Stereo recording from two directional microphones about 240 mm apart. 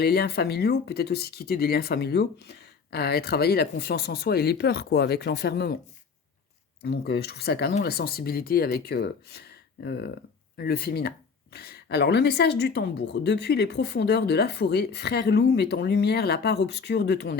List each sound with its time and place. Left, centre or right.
0.0 s speech: left
6.8 s speech: left